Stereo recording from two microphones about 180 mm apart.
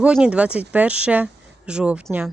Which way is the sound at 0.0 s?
5° right (ahead or behind).